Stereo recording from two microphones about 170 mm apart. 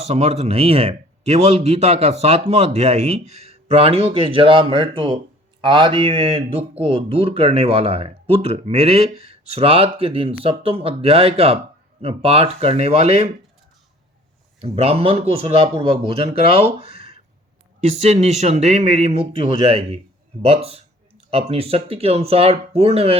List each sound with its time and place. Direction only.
0.0 s speech: 40° right (ahead or behind)
14.6 s speech: 35° right (ahead or behind)